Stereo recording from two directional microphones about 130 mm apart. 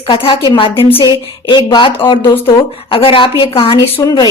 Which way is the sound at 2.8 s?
45° left (ahead or behind).